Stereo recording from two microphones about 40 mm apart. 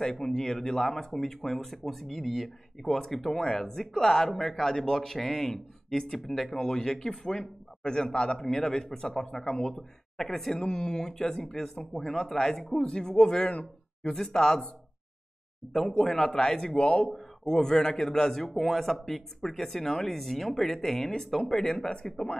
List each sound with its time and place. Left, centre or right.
0.0 s speech: centre
8.4 s speech: centre
9.7 s speech: centre
13.4 s speech: left
14.0 s speech: centre
15.9 s speech: centre
18.5 s speech: centre